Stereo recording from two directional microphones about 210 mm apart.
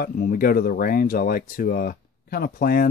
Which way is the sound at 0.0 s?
45° left (ahead or behind).